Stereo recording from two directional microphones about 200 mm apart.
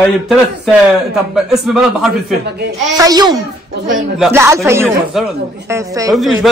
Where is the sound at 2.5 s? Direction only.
55° right (ahead or behind).